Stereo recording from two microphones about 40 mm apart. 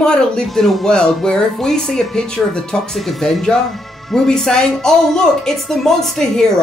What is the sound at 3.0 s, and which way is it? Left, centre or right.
Speech, centre.